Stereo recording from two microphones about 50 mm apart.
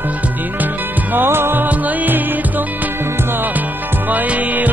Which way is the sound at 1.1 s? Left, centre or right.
Right.